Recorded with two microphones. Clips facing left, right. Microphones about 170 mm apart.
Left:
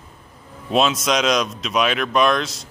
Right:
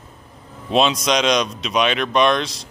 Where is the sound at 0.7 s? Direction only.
Centre (ahead or behind).